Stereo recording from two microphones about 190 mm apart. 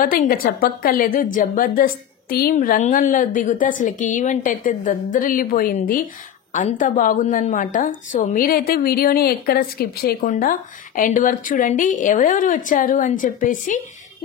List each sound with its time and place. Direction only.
0.0 s a woman's voice: 50° left (ahead or behind)